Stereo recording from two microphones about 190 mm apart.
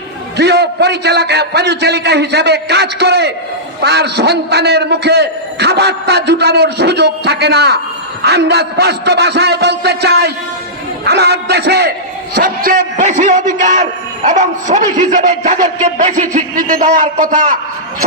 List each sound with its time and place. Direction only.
0.3 s a man's voice: 60° right (ahead or behind); by 17.5 s 40° right (ahead or behind)